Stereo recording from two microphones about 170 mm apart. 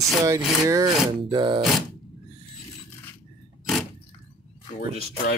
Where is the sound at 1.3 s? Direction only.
30° right (ahead or behind).